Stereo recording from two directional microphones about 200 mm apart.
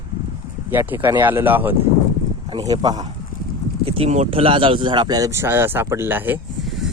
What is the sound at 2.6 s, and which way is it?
Speech, 20° right (ahead or behind).